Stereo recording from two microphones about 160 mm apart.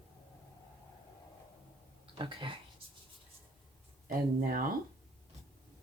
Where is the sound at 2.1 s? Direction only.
30° right (ahead or behind).